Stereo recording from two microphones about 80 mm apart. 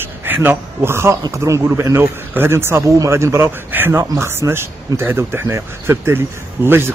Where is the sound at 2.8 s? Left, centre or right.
Right.